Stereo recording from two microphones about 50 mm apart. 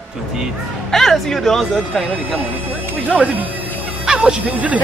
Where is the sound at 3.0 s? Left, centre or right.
Right.